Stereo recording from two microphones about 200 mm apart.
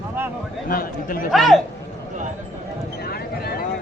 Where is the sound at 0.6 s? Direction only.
45° left (ahead or behind).